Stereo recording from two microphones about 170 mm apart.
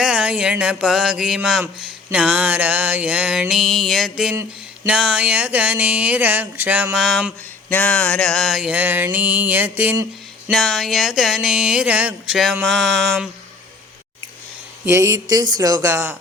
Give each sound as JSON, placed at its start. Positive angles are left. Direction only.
{"t": 0.0, "sound": "speech", "side_deg": -5}
{"t": 7.7, "sound": "speech", "side_deg": 10}
{"t": 10.5, "sound": "speech", "side_deg": 0}
{"t": 14.8, "sound": "speech", "side_deg": -20}